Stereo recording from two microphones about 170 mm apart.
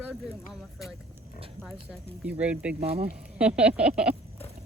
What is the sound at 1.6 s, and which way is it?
Speech, 35° right (ahead or behind).